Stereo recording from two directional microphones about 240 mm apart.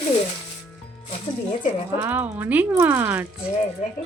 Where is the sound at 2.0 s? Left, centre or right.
Centre.